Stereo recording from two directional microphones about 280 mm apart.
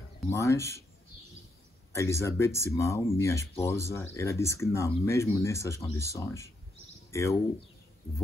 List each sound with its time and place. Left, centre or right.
0.3 s speech: centre
1.9 s speech: centre